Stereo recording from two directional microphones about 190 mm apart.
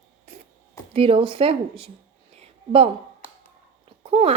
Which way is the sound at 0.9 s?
30° right (ahead or behind).